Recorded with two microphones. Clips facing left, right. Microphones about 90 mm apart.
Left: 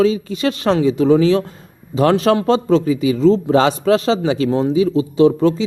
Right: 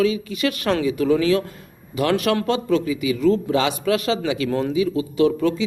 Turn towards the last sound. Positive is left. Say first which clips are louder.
# left 5 dB
turn(degrees=30)  # may be behind; listen again after turning